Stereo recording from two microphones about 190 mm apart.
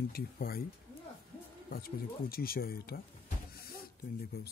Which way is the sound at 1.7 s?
50° left (ahead or behind).